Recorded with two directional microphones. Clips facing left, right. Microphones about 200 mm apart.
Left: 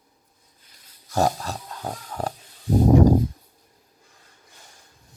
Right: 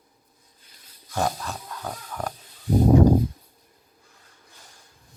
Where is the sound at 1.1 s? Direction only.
40° left (ahead or behind).